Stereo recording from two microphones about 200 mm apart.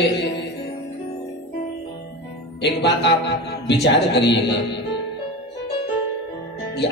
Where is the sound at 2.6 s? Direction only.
60° left (ahead or behind).